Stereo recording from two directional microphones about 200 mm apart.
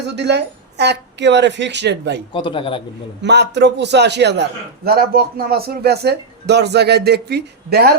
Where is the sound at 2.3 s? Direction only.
25° left (ahead or behind).